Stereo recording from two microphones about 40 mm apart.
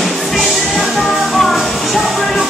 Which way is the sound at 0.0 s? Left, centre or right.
Centre.